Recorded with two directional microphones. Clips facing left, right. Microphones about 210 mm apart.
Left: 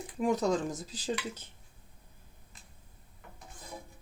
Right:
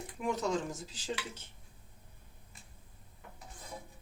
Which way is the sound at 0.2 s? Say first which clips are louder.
Left 5 dB; 35° left (ahead or behind).